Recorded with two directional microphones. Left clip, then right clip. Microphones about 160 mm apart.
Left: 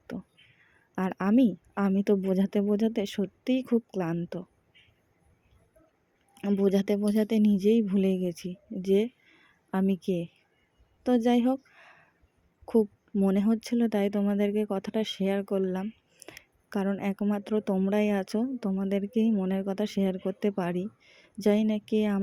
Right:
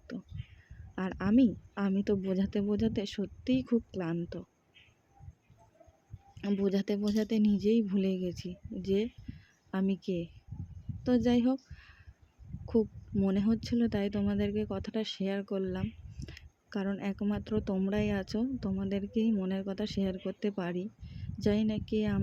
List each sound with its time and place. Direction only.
0.9 s a woman's voice: 25° left (ahead or behind)
6.6 s speech: 25° left (ahead or behind)
11.0 s a sound: 25° left (ahead or behind)
13.1 s speech: 20° left (ahead or behind)